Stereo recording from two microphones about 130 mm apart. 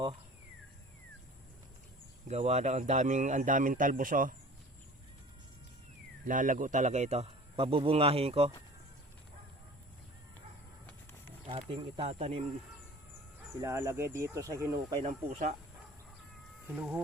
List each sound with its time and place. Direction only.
2.2 s speech: 60° right (ahead or behind); by 4.4 s 90° right
6.2 s a man's voice: 90° right; by 8.4 s 50° right (ahead or behind)
11.8 s speech: 50° right (ahead or behind)
13.6 s speech: 20° right (ahead or behind)
15.0 s a man's voice: 55° right (ahead or behind)
16.7 s speech: 10° right (ahead or behind)